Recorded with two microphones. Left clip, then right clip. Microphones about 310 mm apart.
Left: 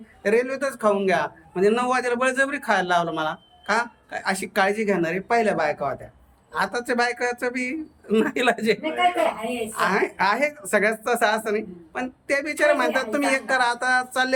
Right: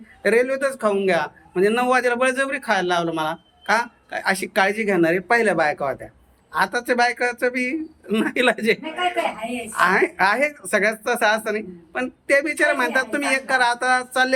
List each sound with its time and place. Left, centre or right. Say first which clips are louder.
0.2 s a man's voice: right 3 dB; centre